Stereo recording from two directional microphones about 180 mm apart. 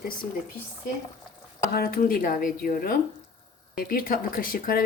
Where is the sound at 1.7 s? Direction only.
55° left (ahead or behind).